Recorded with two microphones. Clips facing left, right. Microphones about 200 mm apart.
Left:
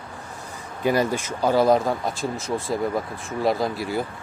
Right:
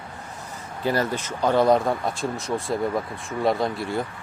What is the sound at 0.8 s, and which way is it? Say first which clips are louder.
Speech: left 3 dB; 10° left (ahead or behind).